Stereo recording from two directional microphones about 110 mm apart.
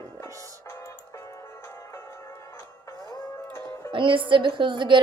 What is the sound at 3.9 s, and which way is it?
Speech, 50° right (ahead or behind).